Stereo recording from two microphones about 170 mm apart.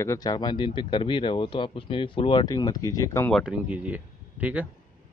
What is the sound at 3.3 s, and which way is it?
Speech, 5° right (ahead or behind).